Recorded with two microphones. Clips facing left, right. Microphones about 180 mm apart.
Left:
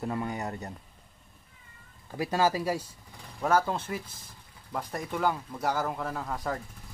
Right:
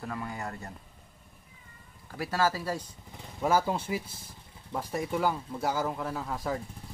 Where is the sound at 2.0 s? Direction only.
20° left (ahead or behind).